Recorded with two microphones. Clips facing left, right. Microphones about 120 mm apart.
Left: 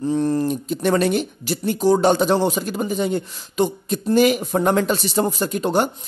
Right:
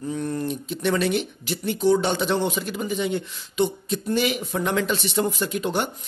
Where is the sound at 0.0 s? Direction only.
30° left (ahead or behind).